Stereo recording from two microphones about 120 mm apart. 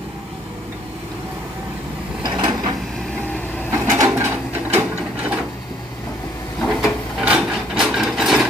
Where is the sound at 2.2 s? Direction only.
40° right (ahead or behind).